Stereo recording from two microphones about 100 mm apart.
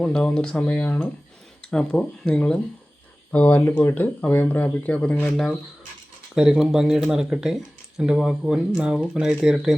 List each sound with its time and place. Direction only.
0.0 s speech: 10° left (ahead or behind)
6.3 s speech: 5° right (ahead or behind)